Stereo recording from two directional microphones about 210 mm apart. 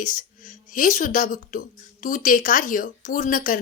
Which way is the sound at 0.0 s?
40° left (ahead or behind).